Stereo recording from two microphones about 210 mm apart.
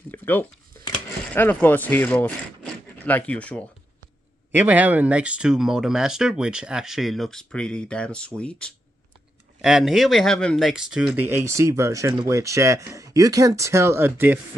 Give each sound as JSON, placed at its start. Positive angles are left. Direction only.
{"t": 0.1, "sound": "speech", "side_deg": 10}
{"t": 4.5, "sound": "speech", "side_deg": -10}